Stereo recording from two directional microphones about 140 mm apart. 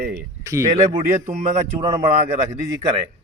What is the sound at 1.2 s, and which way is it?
Speech, 60° right (ahead or behind).